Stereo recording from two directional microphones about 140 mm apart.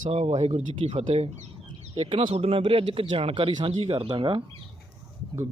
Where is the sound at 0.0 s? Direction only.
50° right (ahead or behind).